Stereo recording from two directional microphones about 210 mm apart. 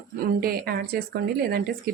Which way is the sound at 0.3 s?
50° right (ahead or behind).